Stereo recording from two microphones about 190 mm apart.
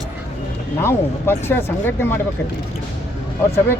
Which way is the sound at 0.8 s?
10° left (ahead or behind).